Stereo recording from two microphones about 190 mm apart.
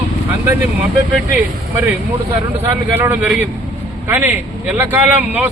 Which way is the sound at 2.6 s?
10° right (ahead or behind).